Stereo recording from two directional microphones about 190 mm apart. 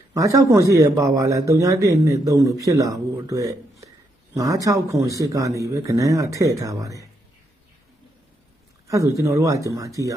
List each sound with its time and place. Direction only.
0.1 s a man's voice: 15° right (ahead or behind)
8.9 s a man's voice: 15° right (ahead or behind)